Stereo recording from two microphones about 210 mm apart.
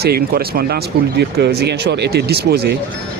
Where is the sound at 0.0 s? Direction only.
45° right (ahead or behind).